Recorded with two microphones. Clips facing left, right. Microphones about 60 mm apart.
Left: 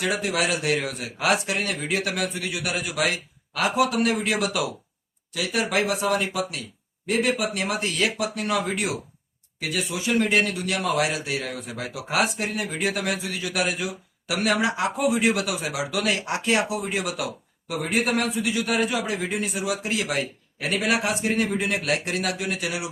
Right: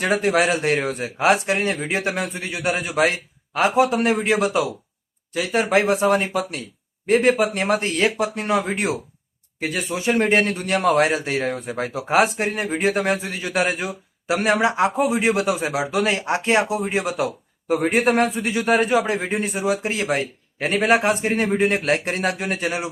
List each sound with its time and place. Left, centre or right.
0.0 s a man's voice: right